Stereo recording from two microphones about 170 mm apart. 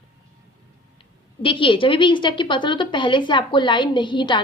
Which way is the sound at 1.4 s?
30° left (ahead or behind).